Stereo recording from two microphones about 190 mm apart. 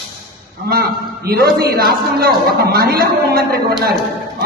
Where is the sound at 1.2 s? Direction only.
55° right (ahead or behind).